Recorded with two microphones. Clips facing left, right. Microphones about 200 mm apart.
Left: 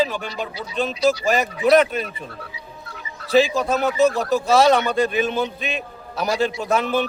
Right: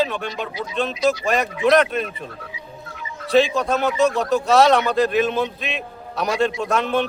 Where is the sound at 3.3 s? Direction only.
Centre (ahead or behind).